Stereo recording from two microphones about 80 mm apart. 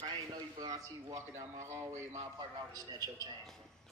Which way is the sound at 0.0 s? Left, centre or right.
Right.